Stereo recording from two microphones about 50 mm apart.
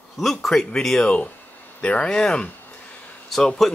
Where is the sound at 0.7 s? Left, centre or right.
Centre.